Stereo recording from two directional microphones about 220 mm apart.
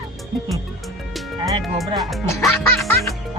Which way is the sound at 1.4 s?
20° right (ahead or behind).